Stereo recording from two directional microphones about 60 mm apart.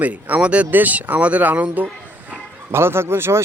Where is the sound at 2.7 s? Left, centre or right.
Right.